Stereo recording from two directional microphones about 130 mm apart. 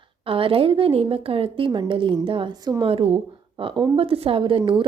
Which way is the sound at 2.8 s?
45° right (ahead or behind).